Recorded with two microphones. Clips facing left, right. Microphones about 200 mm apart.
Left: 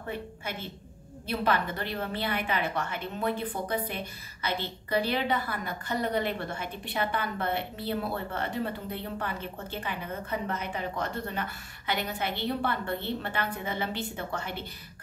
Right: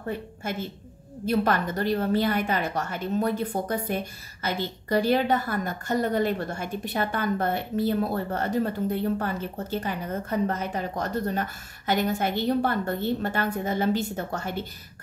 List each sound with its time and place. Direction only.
0.4 s a woman's voice: 45° right (ahead or behind)